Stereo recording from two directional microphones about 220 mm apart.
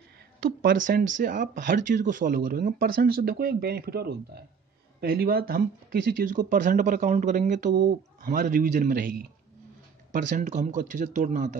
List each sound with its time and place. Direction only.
0.4 s speech: 40° right (ahead or behind)